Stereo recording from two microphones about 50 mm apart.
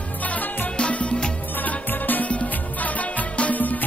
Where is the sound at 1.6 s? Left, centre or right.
Left.